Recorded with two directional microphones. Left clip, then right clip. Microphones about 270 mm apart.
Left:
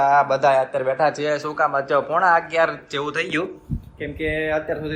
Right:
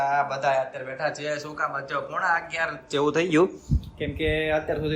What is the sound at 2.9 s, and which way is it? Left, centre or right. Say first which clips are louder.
Speech: right 2 dB; right.